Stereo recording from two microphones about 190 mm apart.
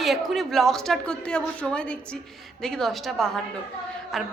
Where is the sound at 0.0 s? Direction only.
Centre (ahead or behind).